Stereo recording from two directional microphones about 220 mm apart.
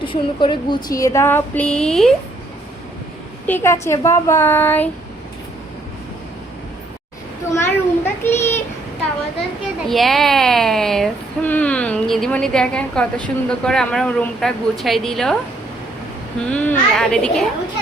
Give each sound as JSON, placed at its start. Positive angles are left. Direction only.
{"t": 0.0, "sound": "speech", "side_deg": 20}
{"t": 3.4, "sound": "speech", "side_deg": 10}
{"t": 7.5, "sound": "a sound", "side_deg": 10}
{"t": 9.9, "sound": "speech", "side_deg": 0}
{"t": 16.4, "sound": "a child's voice", "side_deg": 5}